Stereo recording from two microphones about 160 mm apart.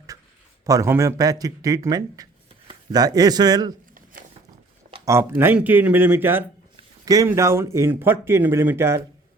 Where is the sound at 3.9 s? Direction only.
60° right (ahead or behind).